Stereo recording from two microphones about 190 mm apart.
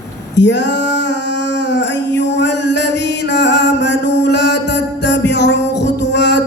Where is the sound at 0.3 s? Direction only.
65° left (ahead or behind).